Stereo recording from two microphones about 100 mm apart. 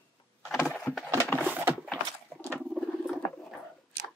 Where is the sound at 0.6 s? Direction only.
10° left (ahead or behind).